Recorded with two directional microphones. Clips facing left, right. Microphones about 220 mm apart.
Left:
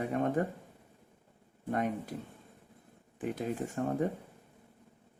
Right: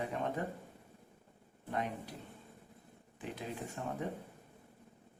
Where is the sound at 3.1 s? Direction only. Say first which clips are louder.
Left 8 dB; 50° left (ahead or behind).